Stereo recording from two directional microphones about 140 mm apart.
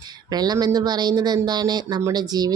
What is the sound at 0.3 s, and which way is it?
A woman's voice, 30° right (ahead or behind).